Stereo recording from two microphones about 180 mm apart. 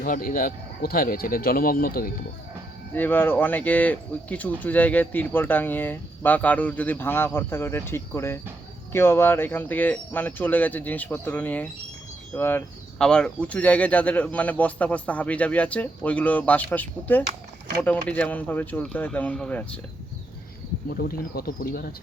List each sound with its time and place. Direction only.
0.0 s speech: 50° left (ahead or behind)
2.9 s speech: 10° left (ahead or behind)
21.0 s speech: 55° left (ahead or behind)